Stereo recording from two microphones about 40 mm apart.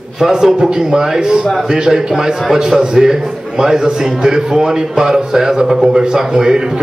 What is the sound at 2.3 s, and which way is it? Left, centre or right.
Speech, centre.